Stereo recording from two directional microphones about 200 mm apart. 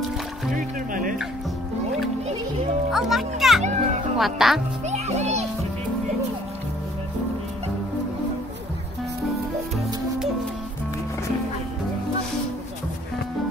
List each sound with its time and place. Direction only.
0.6 s music: 45° right (ahead or behind)
2.9 s music: centre (ahead or behind)
3.6 s music: 35° right (ahead or behind)
4.2 s speech: centre (ahead or behind)
4.8 s music: 35° right (ahead or behind)